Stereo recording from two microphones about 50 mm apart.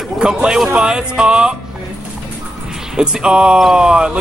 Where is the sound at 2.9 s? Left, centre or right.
Centre.